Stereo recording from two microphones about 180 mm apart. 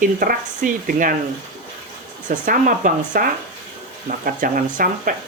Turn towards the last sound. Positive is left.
turn(degrees=-50)  # may be behind; listen again after turning